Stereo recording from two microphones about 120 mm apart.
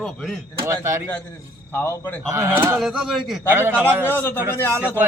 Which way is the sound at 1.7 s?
20° left (ahead or behind).